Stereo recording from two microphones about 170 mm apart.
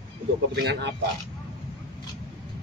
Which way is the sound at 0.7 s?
80° right.